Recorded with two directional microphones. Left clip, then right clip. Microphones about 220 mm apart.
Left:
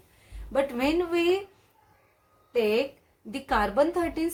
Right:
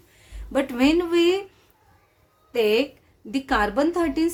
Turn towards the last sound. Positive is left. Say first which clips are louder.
# right 3 dB
turn(degrees=-35)  # may be behind; listen again after turning